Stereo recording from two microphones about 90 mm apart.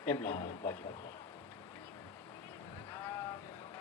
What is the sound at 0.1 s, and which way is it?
Speech, 25° left (ahead or behind).